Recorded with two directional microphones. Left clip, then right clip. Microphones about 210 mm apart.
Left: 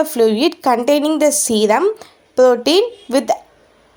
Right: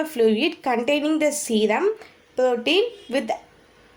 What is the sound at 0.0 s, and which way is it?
A woman's voice, 30° left (ahead or behind).